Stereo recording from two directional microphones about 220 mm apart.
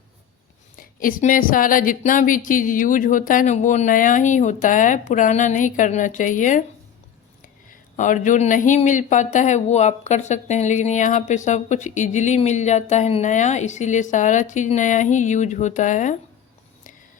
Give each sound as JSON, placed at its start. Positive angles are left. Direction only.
{"t": 0.8, "sound": "speech", "side_deg": 40}